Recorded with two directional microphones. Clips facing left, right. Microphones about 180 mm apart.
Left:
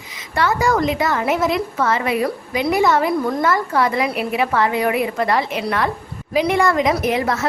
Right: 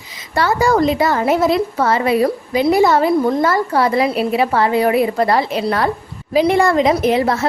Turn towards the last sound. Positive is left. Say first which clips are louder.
# right 4 dB
turn(degrees=-30)  # may be behind; listen again after turning